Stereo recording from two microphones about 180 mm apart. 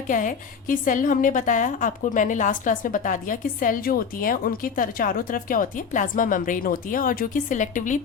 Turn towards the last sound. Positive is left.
turn(degrees=45)  # may be behind; listen again after turning